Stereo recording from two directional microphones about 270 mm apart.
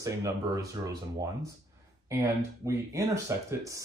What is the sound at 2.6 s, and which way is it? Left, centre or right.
Speech, centre.